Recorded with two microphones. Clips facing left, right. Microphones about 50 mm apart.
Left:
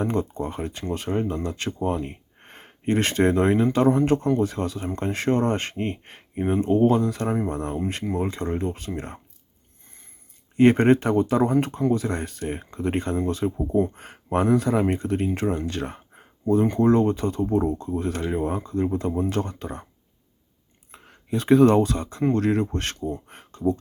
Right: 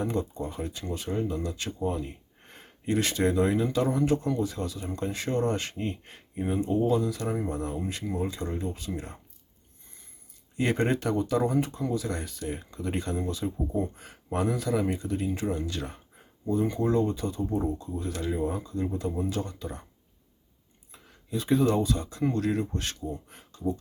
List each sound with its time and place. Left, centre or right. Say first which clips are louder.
0.0 s speech: left 5 dB; left
10.6 s speech: left 10 dB; left
20.9 s speech: left 6 dB; left